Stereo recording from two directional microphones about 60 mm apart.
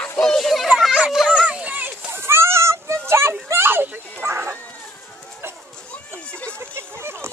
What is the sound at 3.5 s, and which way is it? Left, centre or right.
Speech, right.